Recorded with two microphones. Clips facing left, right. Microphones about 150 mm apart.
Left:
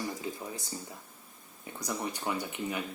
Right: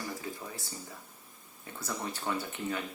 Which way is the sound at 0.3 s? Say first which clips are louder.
Left 3 dB; 20° left (ahead or behind).